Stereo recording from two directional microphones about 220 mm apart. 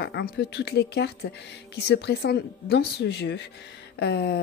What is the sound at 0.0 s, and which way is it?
Speech, 50° left (ahead or behind).